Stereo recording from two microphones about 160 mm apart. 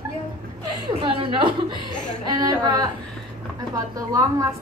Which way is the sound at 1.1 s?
30° right (ahead or behind).